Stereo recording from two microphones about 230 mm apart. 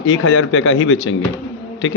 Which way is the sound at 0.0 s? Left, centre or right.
Left.